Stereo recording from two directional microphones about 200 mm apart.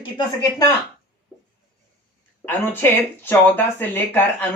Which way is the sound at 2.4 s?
10° left (ahead or behind).